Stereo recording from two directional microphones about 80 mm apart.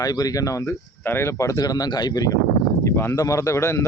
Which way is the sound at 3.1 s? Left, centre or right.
Left.